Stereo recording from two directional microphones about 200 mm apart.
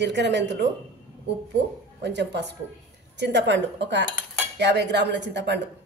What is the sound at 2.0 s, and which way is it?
A woman's voice, 60° right (ahead or behind).